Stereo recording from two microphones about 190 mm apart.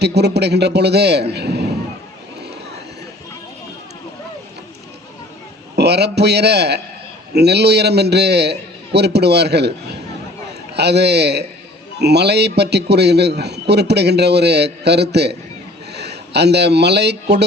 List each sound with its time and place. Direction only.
0.0 s a man's voice: 60° right (ahead or behind)
5.7 s a man's voice: 60° right (ahead or behind)